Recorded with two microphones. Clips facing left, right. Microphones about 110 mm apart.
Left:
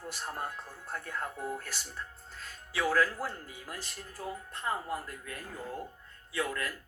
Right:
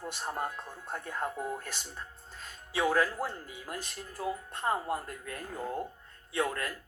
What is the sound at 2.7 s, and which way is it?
Speech, 25° right (ahead or behind).